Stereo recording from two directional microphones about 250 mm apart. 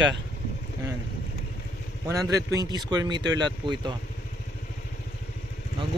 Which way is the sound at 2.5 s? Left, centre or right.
Centre.